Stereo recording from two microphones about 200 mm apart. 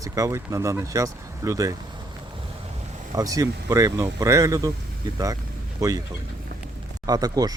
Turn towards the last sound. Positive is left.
turn(degrees=-20)  # may be behind; listen again after turning